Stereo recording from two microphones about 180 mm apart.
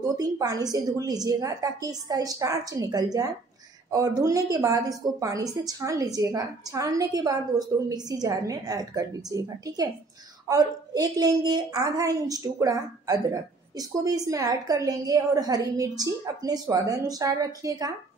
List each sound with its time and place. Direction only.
0.0 s a woman's voice: 20° right (ahead or behind)